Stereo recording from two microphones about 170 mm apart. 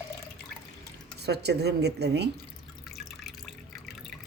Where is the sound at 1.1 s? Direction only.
75° right (ahead or behind).